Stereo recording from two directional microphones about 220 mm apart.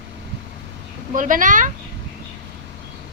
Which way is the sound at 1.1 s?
35° right (ahead or behind).